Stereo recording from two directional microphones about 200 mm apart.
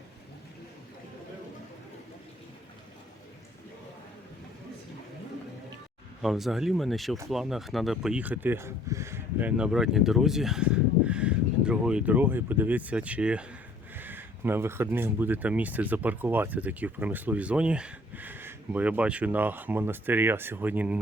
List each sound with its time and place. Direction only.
6.2 s speech: centre (ahead or behind)